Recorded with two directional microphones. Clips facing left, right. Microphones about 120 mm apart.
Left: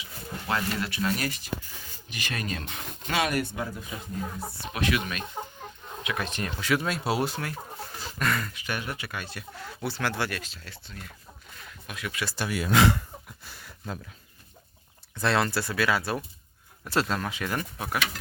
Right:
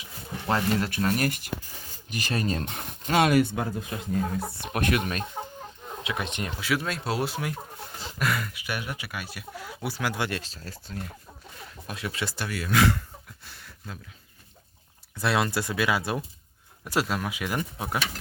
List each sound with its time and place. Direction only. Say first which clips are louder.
0.4 s speech: right 4 dB; 40° right (ahead or behind); by 1.5 s 55° right (ahead or behind)
2.0 s speech: right 5 dB; 40° right (ahead or behind)
3.2 s speech: right 6 dB; 90° right; by 5.2 s 45° right (ahead or behind)
6.0 s speech: even; 25° right (ahead or behind)
6.6 s speech: left 2 dB; centre (ahead or behind); by 10.5 s 25° right (ahead or behind)
10.5 s speech: right 6 dB; 40° right (ahead or behind)
11.9 s speech: right 2 dB; 30° right (ahead or behind)
12.5 s speech: left 1 dB; 20° left (ahead or behind)
13.4 s a sound: left 1 dB; 5° left (ahead or behind)
15.1 s speech: even; 10° right (ahead or behind)